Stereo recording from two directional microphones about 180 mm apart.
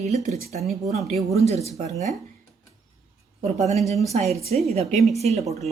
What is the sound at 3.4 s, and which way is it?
A woman's voice, 40° right (ahead or behind).